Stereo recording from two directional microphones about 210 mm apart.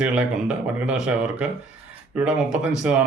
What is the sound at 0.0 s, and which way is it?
A man's voice, 5° right (ahead or behind).